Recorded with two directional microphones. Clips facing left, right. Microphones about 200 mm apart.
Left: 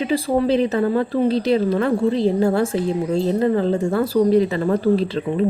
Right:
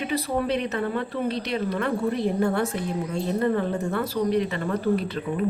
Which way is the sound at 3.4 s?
90° left.